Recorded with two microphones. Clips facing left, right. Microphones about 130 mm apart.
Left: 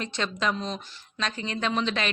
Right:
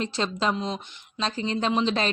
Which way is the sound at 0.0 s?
30° right (ahead or behind).